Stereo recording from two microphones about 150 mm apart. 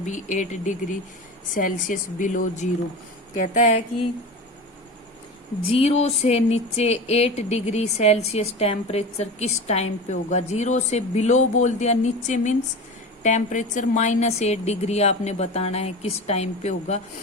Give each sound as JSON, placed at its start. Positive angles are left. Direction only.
{"t": 0.0, "sound": "speech", "side_deg": 55}
{"t": 5.7, "sound": "speech", "side_deg": 45}